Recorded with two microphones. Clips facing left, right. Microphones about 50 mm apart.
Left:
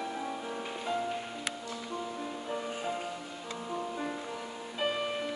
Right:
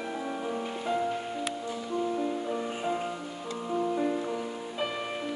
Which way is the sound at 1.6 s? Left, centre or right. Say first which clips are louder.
Right 7 dB; centre.